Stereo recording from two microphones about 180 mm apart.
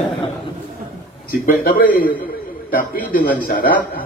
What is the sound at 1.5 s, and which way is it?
A man's voice, 50° left (ahead or behind).